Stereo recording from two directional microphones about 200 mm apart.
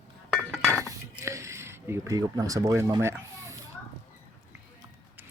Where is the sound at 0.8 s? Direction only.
15° right (ahead or behind).